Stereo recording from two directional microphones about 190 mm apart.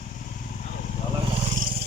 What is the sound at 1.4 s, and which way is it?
Vehicle, 40° right (ahead or behind).